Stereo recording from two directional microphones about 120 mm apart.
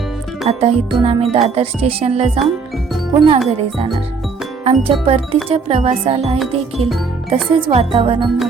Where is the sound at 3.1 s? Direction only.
45° right (ahead or behind).